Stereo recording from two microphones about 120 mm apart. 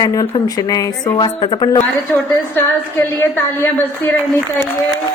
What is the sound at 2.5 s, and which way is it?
A woman's voice, 20° left (ahead or behind).